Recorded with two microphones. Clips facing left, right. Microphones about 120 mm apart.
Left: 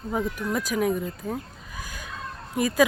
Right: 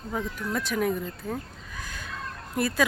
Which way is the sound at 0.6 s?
5° left (ahead or behind).